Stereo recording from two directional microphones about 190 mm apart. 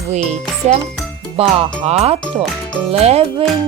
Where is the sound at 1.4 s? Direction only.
30° right (ahead or behind).